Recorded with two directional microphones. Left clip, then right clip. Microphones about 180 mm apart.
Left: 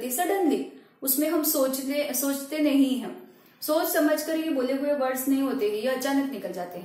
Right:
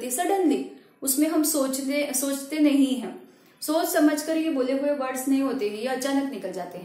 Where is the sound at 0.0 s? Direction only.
25° right (ahead or behind).